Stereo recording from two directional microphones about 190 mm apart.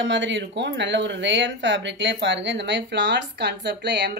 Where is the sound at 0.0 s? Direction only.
75° right (ahead or behind).